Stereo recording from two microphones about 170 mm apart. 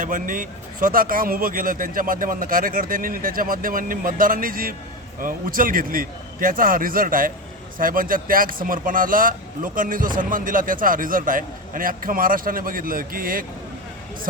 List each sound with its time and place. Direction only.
0.0 s speech: 50° right (ahead or behind)